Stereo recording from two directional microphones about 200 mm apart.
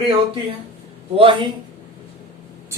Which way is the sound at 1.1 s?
25° right (ahead or behind).